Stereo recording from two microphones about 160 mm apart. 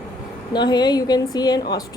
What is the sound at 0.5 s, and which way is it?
A woman's voice, 25° left (ahead or behind).